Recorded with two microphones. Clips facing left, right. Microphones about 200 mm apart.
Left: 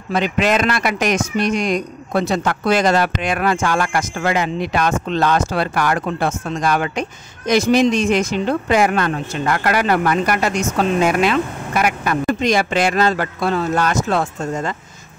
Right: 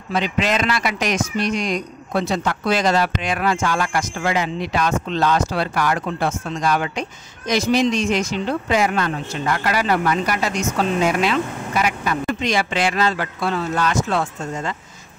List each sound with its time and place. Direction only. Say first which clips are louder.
0.1 s speech: left 3 dB; 55° left (ahead or behind)